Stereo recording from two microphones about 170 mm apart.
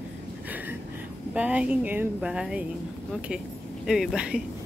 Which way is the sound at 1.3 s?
5° right (ahead or behind).